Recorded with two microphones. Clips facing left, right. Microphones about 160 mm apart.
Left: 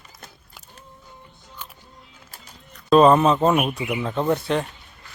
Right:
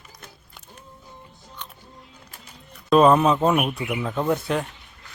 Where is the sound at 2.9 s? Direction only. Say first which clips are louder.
Left 1 dB; centre (ahead or behind).